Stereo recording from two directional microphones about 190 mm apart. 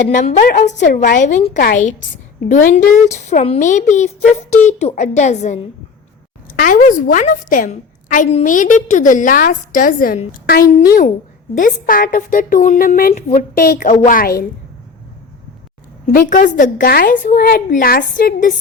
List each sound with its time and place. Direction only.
0.0 s speech: 40° left (ahead or behind)
1.5 s a woman's voice: 50° left (ahead or behind)
6.6 s a woman's voice: 45° left (ahead or behind)
16.0 s a woman's voice: 45° left (ahead or behind)